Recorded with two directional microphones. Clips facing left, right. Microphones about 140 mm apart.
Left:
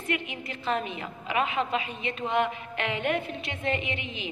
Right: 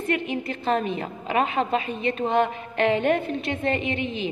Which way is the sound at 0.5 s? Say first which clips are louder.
Right 4 dB; 40° right (ahead or behind).